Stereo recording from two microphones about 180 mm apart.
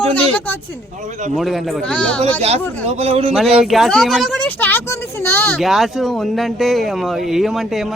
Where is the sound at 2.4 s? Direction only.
35° right (ahead or behind).